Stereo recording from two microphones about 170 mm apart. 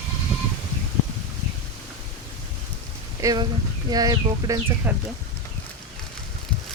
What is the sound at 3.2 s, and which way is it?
Speech, 20° right (ahead or behind).